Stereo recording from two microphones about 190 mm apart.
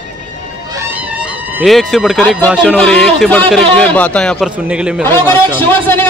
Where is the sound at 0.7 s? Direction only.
10° right (ahead or behind).